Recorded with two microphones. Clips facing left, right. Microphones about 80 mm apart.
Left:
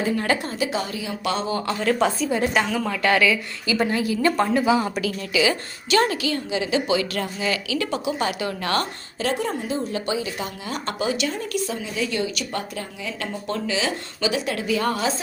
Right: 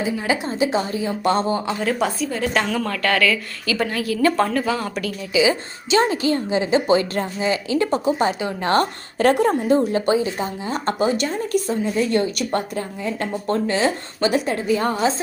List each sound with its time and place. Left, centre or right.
0.0 s a woman's voice: centre
0.4 s speech: right
1.8 s a woman's voice: centre
5.3 s a woman's voice: centre
6.2 s speech: right
8.2 s a woman's voice: right
9.1 s a woman's voice: right
9.9 s speech: right
14.5 s speech: right